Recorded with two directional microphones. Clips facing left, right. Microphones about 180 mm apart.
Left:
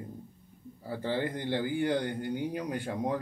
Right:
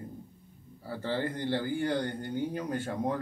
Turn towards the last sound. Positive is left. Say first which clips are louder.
# even
turn(degrees=15)  # may be behind; listen again after turning